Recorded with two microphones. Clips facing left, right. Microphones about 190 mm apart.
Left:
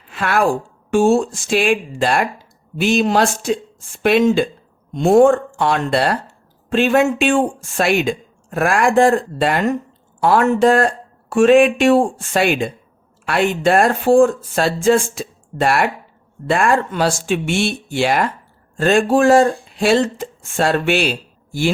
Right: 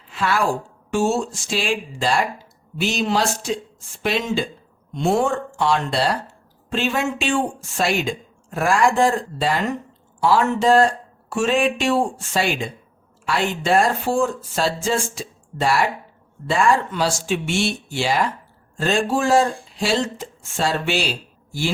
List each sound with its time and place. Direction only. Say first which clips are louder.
0.1 s speech: left 4 dB; 60° left (ahead or behind)